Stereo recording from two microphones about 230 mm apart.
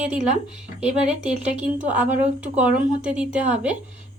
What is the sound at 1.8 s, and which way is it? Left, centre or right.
A woman's voice, centre.